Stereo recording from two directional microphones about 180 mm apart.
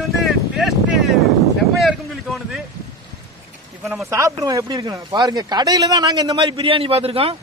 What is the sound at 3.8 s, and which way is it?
Speech, centre (ahead or behind).